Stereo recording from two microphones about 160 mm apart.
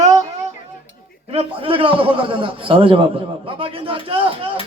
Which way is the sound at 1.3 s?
35° right (ahead or behind).